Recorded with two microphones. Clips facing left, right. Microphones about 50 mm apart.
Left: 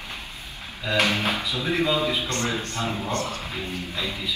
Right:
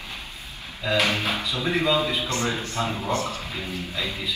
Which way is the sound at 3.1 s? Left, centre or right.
Left.